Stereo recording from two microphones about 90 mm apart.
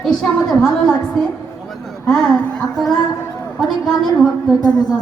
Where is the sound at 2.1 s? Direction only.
5° left (ahead or behind).